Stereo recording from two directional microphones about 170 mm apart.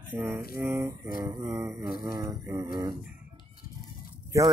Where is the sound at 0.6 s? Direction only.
15° right (ahead or behind).